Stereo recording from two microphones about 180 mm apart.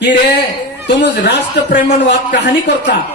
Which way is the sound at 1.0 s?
70° left (ahead or behind).